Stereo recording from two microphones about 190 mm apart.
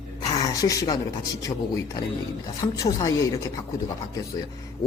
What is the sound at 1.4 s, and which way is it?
A man's voice, 15° left (ahead or behind).